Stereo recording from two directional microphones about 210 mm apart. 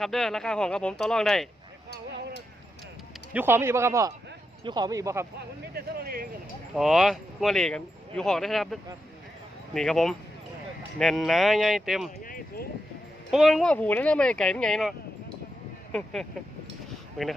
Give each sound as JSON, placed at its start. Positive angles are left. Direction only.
{"t": 0.0, "sound": "speech", "side_deg": 0}
{"t": 3.3, "sound": "speech", "side_deg": -10}
{"t": 5.7, "sound": "a sound", "side_deg": -45}
{"t": 6.7, "sound": "speech", "side_deg": 0}
{"t": 12.2, "sound": "a sound", "side_deg": 40}
{"t": 13.3, "sound": "speech", "side_deg": 0}